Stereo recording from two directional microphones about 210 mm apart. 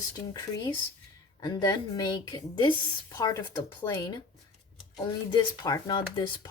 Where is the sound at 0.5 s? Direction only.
15° left (ahead or behind).